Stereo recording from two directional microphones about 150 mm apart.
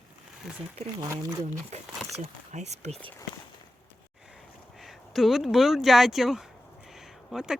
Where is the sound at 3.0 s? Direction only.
10° left (ahead or behind).